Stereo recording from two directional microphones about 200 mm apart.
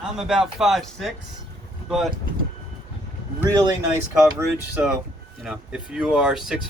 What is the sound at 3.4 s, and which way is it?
Speech, 15° right (ahead or behind).